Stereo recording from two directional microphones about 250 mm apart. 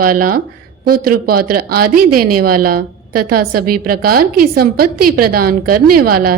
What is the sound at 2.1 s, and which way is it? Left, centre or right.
Speech, right.